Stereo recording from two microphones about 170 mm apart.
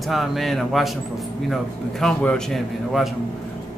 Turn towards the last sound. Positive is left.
turn(degrees=0)  # may be behind; listen again after turning